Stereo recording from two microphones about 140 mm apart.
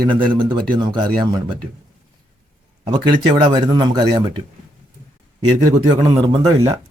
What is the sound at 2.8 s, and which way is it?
Speech, 35° right (ahead or behind).